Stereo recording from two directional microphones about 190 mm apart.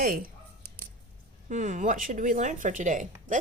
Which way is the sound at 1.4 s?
40° right (ahead or behind).